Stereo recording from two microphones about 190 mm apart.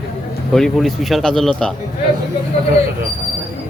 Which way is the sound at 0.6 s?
Centre (ahead or behind).